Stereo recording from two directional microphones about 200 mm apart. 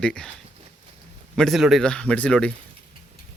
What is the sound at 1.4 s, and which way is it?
A man's voice, centre (ahead or behind).